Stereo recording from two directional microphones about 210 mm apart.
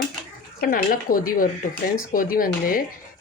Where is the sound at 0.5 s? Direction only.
40° left (ahead or behind).